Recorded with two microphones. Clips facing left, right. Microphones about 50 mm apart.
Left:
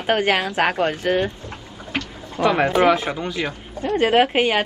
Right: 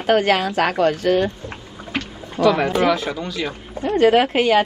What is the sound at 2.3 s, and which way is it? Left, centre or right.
Speech, left.